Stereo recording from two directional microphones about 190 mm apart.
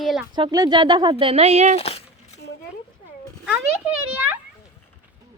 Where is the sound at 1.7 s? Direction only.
30° left (ahead or behind).